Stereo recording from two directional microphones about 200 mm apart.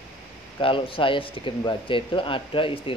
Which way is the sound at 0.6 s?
25° left (ahead or behind).